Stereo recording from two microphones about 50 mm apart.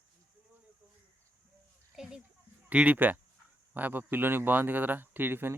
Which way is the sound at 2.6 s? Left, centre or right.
Right.